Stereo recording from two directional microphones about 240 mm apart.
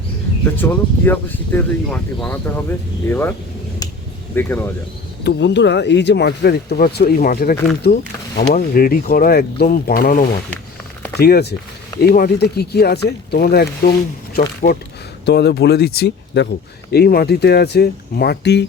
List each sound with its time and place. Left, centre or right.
0.5 s speech: centre
4.4 s speech: centre
5.2 s speech: left